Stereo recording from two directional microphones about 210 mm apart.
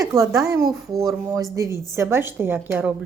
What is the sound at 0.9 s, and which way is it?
Speech, centre (ahead or behind).